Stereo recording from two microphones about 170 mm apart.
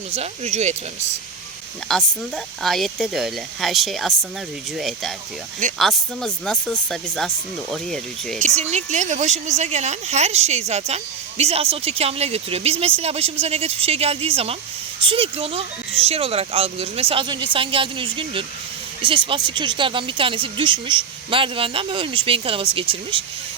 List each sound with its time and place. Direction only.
0.1 s speech: 40° right (ahead or behind)
1.9 s speech: centre (ahead or behind)
8.4 s speech: 40° right (ahead or behind)